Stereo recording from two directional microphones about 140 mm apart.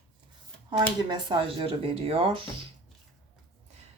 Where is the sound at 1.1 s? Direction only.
35° right (ahead or behind).